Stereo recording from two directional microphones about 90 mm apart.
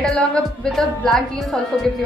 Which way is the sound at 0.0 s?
5° left (ahead or behind).